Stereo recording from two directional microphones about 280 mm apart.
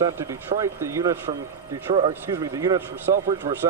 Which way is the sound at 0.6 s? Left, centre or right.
Centre.